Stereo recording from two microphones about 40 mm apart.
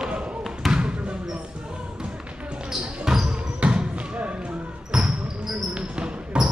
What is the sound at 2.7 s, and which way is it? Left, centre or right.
Basketball bounce, centre.